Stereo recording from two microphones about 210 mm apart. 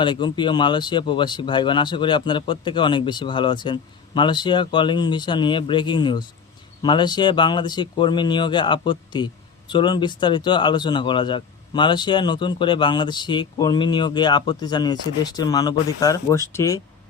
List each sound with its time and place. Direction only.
0.0 s speech: 20° left (ahead or behind)